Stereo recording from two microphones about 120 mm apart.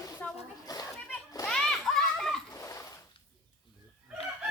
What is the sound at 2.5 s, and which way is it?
Dog, 25° left (ahead or behind).